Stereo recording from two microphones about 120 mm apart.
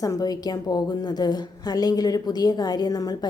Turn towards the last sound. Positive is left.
turn(degrees=35)  # may be behind; listen again after turning